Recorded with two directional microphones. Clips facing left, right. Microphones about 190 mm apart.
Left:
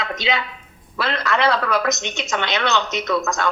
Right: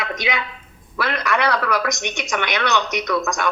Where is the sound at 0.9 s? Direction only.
25° left (ahead or behind).